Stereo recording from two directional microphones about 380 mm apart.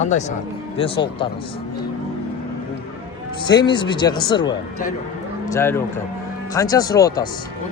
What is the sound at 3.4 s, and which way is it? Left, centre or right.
Speech, centre.